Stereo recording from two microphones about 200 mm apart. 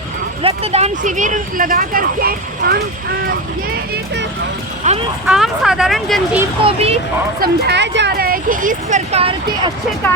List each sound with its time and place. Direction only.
0.4 s speech: 30° right (ahead or behind); by 2.8 s 50° right (ahead or behind)
4.8 s speech: 35° right (ahead or behind)
5.2 s speech: centre (ahead or behind)
6.7 s speech: 30° right (ahead or behind)
7.3 s speech: 55° right (ahead or behind); by 9.7 s 30° right (ahead or behind)